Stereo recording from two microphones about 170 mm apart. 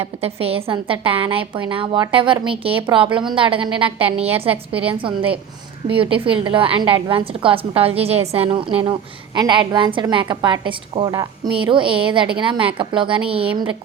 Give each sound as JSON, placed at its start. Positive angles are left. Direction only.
{"t": 0.0, "sound": "a woman's voice", "side_deg": -35}